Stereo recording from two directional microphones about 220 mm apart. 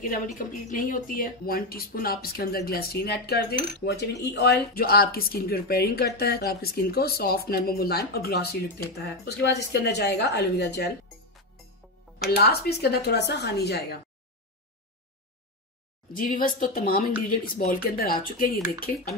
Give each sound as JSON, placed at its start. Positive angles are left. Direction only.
{"t": 0.4, "sound": "speech", "side_deg": 35}
{"t": 12.4, "sound": "speech", "side_deg": 45}
{"t": 16.1, "sound": "speech", "side_deg": 40}